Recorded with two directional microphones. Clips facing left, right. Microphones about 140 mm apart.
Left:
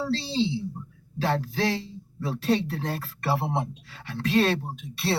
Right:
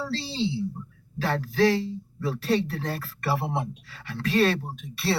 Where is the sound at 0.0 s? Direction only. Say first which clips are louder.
Left 3 dB; 20° left (ahead or behind).